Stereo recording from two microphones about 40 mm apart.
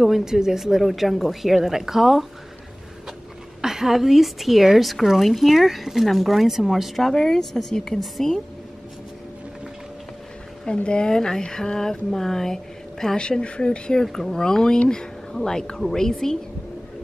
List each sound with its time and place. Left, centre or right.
0.0 s a woman's voice: centre
3.6 s a woman's voice: centre
10.7 s a woman's voice: left